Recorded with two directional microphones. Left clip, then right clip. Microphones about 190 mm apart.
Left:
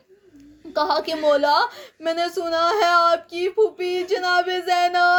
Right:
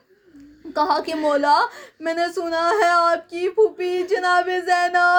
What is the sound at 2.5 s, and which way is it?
Speech, 45° left (ahead or behind).